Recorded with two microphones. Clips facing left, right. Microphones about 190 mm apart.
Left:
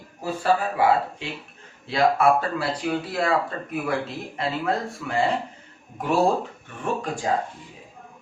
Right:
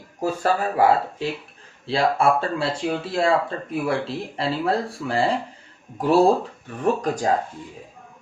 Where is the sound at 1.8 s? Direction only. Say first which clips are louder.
Even; 30° right (ahead or behind).